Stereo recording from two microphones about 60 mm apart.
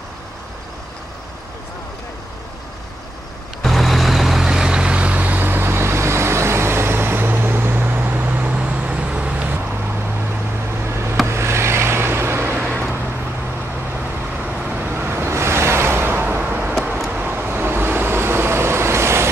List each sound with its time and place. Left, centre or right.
3.6 s vehicle: centre; by 9.6 s right
11.2 s vehicle: right
14.4 s vehicle: right